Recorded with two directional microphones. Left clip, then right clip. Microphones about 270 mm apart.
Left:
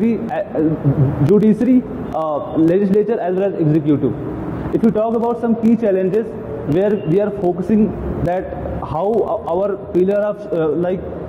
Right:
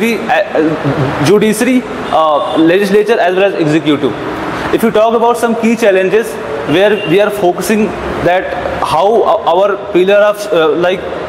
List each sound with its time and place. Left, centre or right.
0.0 s speech: centre
9.0 s speech: right
9.6 s speech: centre